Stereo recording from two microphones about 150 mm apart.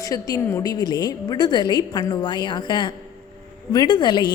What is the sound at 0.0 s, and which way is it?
A woman's voice, 25° left (ahead or behind).